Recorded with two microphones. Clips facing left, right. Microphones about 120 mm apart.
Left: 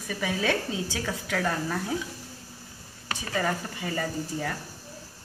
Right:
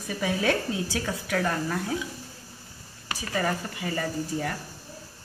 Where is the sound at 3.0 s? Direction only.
5° right (ahead or behind).